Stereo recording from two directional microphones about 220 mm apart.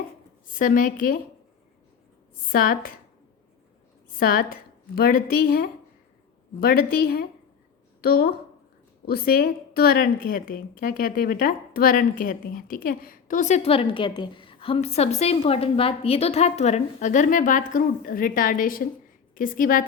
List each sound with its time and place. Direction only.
0.6 s a woman's voice: 40° left (ahead or behind)
2.5 s a woman's voice: 40° left (ahead or behind)
4.2 s a woman's voice: 40° left (ahead or behind)